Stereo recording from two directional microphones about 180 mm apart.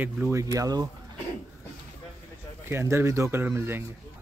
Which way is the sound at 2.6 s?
15° right (ahead or behind).